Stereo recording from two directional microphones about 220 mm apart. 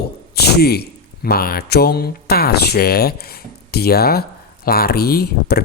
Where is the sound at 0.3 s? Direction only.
45° left (ahead or behind).